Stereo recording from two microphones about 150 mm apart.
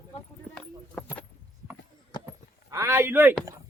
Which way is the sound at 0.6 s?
5° left (ahead or behind).